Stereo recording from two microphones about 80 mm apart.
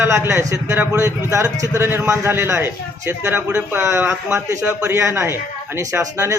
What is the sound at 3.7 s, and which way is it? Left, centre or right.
A man's voice, right.